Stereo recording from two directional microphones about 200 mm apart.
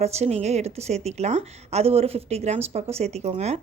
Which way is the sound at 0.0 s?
30° right (ahead or behind).